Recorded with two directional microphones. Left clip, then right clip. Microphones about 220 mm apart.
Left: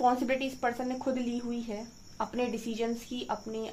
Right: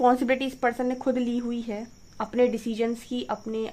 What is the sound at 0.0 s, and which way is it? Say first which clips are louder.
A woman's voice: right 5 dB; 45° right (ahead or behind).